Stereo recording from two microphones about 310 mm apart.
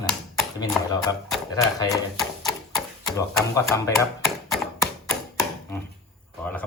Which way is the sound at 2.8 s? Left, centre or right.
Centre.